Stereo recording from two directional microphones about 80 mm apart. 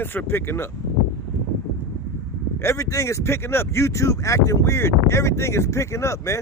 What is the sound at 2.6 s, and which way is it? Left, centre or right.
Speech, left.